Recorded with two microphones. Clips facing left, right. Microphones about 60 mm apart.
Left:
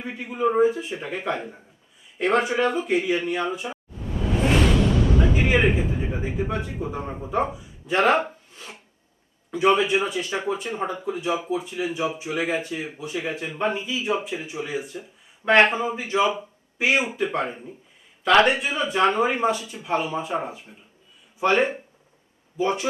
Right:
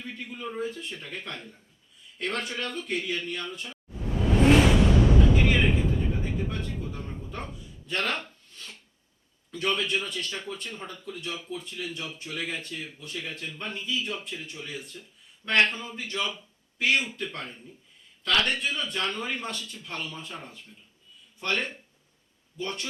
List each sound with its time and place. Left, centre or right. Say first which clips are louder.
0.0 s a man's voice: left 12 dB; centre
5.4 s a man's voice: left 4 dB; centre
8.5 s filing: left 4 dB; centre
9.5 s a man's voice: left 9 dB; centre